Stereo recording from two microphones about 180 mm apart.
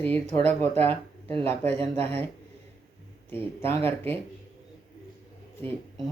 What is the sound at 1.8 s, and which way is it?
Speech, 35° right (ahead or behind).